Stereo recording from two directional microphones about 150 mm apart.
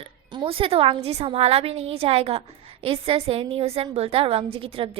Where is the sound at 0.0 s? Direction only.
35° right (ahead or behind).